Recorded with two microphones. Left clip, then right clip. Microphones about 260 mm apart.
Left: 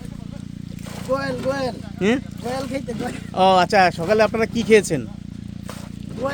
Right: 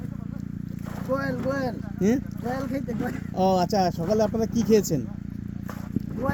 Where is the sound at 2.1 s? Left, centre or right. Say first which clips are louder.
Left 5 dB; centre.